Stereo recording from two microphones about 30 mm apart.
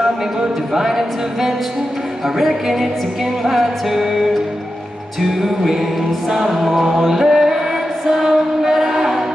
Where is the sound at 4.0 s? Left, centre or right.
Centre.